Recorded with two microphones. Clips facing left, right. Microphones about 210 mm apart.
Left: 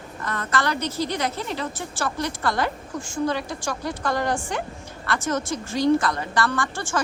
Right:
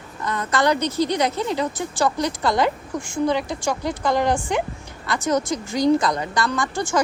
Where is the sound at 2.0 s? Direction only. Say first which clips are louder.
Right 5 dB; 15° right (ahead or behind).